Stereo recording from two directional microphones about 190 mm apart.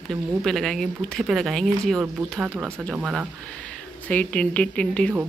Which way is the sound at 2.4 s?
15° right (ahead or behind).